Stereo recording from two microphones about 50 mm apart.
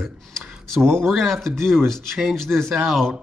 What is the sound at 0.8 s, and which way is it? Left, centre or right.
Speech, right.